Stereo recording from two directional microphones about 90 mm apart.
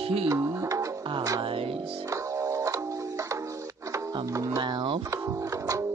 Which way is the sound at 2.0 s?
35° right (ahead or behind).